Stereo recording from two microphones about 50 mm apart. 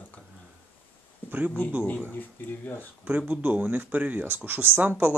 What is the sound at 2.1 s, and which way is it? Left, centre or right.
Speech, left.